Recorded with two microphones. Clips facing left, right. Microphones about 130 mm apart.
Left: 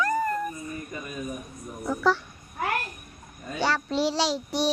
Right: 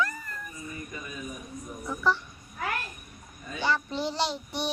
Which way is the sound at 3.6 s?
80° left.